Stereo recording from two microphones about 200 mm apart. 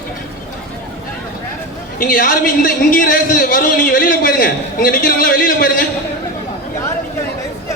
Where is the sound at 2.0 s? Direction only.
45° left (ahead or behind).